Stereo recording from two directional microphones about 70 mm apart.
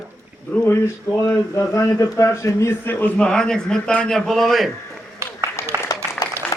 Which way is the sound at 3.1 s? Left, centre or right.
Centre.